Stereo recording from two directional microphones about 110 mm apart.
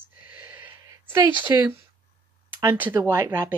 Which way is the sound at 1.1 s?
20° right (ahead or behind).